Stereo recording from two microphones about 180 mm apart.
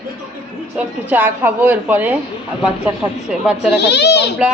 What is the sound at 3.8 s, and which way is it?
Speech, 70° left (ahead or behind).